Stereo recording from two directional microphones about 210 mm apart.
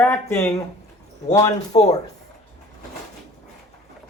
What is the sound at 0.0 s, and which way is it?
Speech, 10° left (ahead or behind).